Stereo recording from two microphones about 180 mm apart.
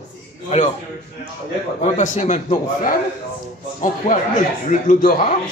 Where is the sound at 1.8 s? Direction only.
40° left (ahead or behind).